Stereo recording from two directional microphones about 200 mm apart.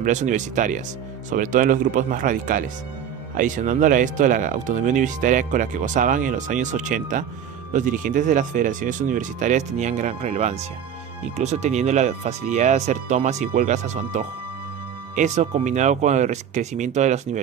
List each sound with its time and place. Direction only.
0.0 s speech: 40° right (ahead or behind)